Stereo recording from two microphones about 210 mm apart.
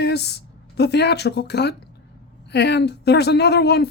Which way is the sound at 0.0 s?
50° left (ahead or behind).